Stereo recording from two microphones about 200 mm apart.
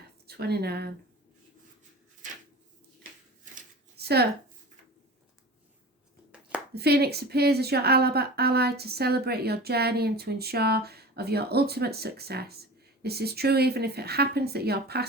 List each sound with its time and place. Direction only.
0.3 s speech: 55° right (ahead or behind)
3.5 s shuffling cards: 55° right (ahead or behind)
6.7 s speech: 55° right (ahead or behind)